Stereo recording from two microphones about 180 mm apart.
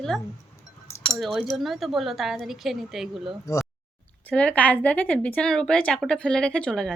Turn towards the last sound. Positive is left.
turn(degrees=5)  # may be behind; listen again after turning